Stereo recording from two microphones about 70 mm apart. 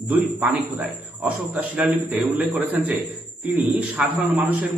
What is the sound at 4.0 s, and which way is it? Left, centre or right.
Speech, centre.